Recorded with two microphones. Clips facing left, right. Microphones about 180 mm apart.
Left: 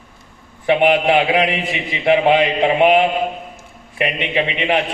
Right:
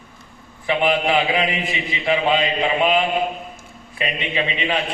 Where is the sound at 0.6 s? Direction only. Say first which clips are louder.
Left 5 dB; 65° left (ahead or behind).